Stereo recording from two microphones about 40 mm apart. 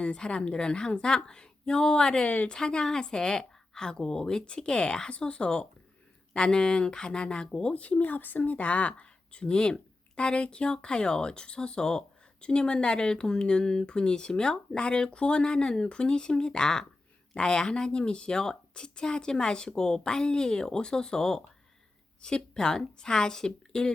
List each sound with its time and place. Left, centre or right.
0.0 s speech: left
7.7 s a woman's voice: left; by 23.9 s centre